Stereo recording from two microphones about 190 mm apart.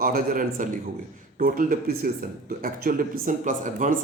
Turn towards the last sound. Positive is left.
turn(degrees=-40)  # may be behind; listen again after turning